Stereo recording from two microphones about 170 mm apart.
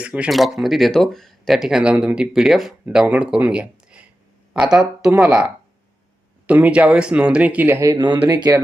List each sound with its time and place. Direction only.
0.0 s speech: 5° right (ahead or behind)
6.5 s speech: 10° right (ahead or behind)